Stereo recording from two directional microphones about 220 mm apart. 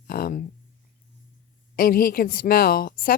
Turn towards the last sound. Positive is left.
turn(degrees=40)  # may be behind; listen again after turning